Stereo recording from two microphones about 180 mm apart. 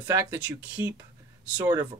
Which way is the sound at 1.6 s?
20° right (ahead or behind).